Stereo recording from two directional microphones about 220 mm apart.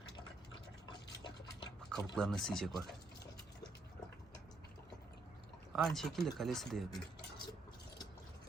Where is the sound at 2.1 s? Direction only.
Centre (ahead or behind).